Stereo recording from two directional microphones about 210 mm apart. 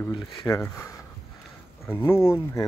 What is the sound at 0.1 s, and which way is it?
Speech, 15° left (ahead or behind).